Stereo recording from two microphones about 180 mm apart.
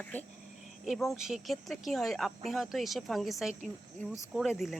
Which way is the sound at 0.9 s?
Centre (ahead or behind).